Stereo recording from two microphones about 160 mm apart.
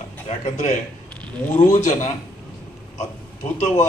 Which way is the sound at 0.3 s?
45° left (ahead or behind).